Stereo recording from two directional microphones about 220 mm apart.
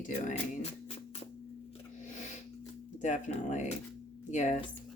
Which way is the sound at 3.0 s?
35° left (ahead or behind).